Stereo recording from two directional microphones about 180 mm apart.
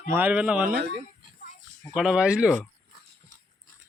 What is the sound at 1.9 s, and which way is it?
Speech, 5° right (ahead or behind).